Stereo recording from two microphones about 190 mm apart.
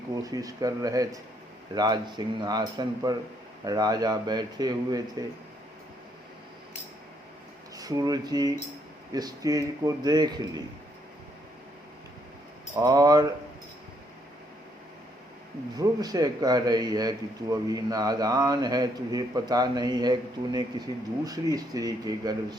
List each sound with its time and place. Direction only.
0.1 s a man's voice: 20° right (ahead or behind)
7.8 s a man's voice: 20° right (ahead or behind)
12.7 s a man's voice: 20° right (ahead or behind)
15.7 s a man's voice: 20° right (ahead or behind)